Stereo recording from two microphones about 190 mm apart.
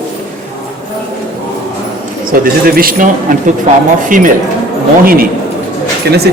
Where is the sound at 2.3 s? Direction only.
50° right (ahead or behind).